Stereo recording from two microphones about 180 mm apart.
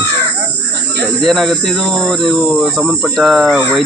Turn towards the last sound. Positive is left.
turn(degrees=0)  # may be behind; listen again after turning